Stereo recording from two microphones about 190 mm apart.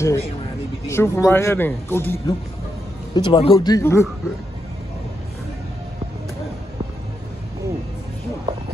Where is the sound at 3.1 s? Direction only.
25° left (ahead or behind).